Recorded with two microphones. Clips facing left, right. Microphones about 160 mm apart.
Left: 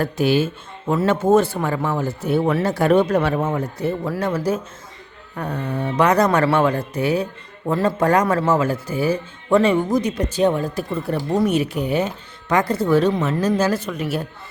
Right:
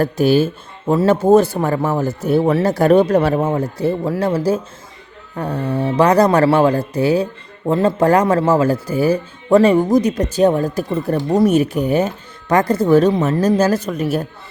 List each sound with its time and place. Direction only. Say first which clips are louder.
0.0 s speech: right 4 dB; 40° right (ahead or behind)